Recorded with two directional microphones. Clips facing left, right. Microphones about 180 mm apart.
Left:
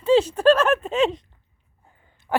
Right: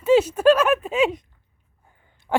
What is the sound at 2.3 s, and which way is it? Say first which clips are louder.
Owl: right 1 dB; 10° right (ahead or behind).